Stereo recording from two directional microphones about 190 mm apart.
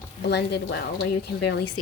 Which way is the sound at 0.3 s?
60° left (ahead or behind).